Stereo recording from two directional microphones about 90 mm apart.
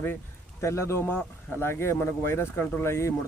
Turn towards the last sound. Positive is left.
turn(degrees=30)  # may be behind; listen again after turning